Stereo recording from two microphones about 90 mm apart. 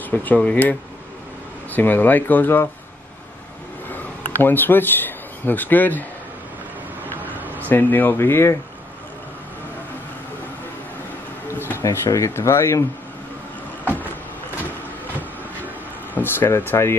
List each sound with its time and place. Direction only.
0.1 s speech: 15° left (ahead or behind)
3.9 s a sound: 20° left (ahead or behind)
7.5 s speech: 20° left (ahead or behind)
11.4 s a sound: 25° left (ahead or behind)
11.8 s speech: 35° left (ahead or behind)
16.2 s speech: 25° left (ahead or behind)